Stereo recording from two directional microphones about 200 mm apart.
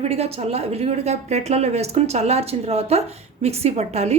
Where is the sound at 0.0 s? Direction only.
30° right (ahead or behind).